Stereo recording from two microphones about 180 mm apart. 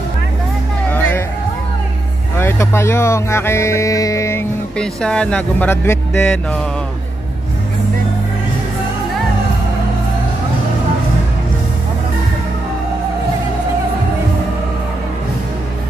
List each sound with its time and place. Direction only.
0.8 s music: 10° left (ahead or behind)
2.3 s speech: 15° left (ahead or behind)